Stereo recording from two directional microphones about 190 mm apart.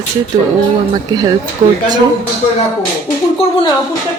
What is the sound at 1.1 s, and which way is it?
Speech, 20° right (ahead or behind).